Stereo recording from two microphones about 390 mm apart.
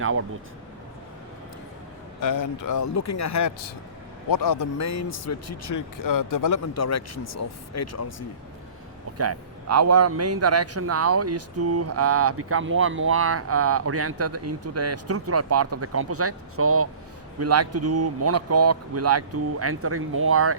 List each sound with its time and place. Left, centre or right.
0.0 s a man's voice: right
2.2 s a man's voice: left
9.1 s a man's voice: right